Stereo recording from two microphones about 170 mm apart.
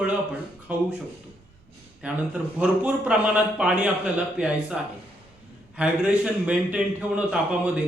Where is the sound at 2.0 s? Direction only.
5° right (ahead or behind).